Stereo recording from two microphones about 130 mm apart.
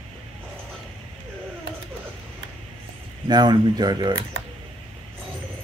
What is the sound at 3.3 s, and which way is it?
Speech, 35° right (ahead or behind).